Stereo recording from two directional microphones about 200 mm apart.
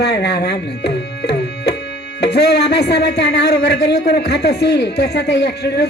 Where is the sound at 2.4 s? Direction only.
55° left (ahead or behind).